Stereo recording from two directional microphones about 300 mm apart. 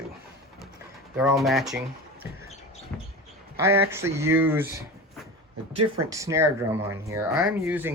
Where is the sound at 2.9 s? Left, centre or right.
Centre.